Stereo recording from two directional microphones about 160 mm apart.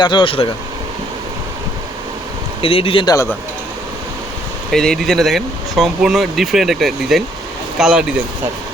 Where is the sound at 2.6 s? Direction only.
35° left (ahead or behind).